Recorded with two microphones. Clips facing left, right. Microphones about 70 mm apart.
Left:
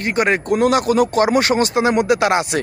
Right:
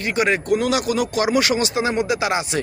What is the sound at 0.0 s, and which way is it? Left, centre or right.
Speech, left.